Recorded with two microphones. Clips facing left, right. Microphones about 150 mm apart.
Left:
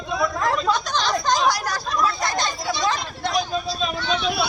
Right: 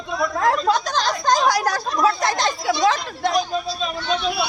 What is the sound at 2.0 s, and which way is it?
Speech, 90° right.